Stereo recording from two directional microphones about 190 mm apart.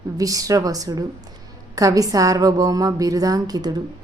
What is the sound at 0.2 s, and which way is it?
A woman's voice, 20° right (ahead or behind).